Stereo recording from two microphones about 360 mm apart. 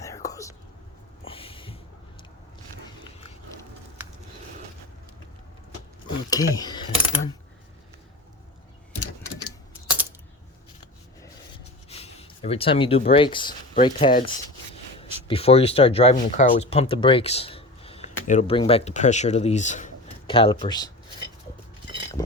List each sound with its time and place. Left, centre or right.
0.0 s whispering: centre
1.2 s a sound: centre
6.3 s speech: centre
11.9 s speech: centre
15.3 s speech: centre